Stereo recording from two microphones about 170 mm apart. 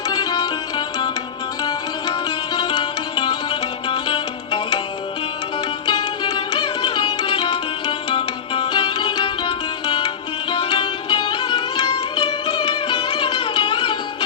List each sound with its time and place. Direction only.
0.1 s music: 20° left (ahead or behind)
2.6 s music: 25° left (ahead or behind)
5.8 s music: 25° left (ahead or behind)